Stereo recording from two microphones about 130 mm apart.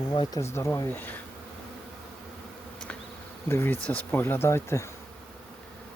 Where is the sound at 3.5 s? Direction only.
20° left (ahead or behind).